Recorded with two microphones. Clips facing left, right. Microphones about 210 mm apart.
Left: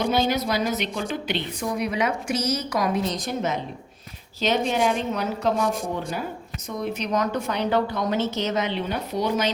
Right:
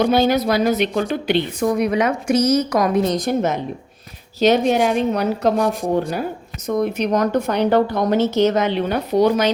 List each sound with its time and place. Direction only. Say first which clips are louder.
0.0 s a woman's voice: right 7 dB; 60° right (ahead or behind); by 3.2 s 45° right (ahead or behind)
3.2 s a woman's voice: right 7 dB; 60° right (ahead or behind)